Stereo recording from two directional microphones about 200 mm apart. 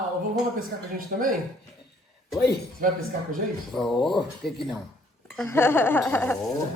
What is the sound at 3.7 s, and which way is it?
Speech, centre (ahead or behind).